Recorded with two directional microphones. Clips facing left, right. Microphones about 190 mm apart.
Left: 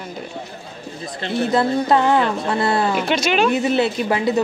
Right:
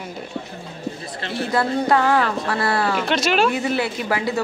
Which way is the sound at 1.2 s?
20° left (ahead or behind).